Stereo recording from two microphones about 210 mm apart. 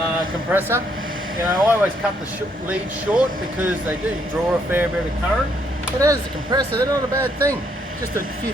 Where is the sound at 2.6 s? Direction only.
5° right (ahead or behind).